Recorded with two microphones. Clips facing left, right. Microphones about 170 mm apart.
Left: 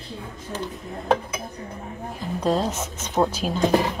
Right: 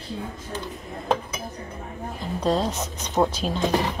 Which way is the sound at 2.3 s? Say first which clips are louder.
Left 1 dB; 10° left (ahead or behind).